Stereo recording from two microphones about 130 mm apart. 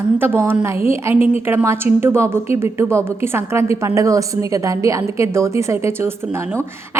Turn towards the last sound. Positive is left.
turn(degrees=-20)  # may be behind; listen again after turning